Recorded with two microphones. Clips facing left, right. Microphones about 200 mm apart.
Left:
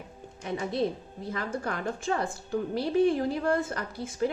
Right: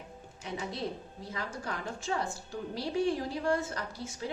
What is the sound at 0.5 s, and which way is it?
A woman's voice, 55° left (ahead or behind).